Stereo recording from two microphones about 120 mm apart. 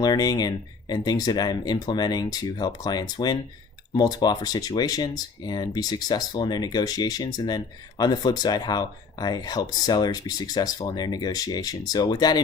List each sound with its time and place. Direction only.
0.0 s speech: 35° left (ahead or behind)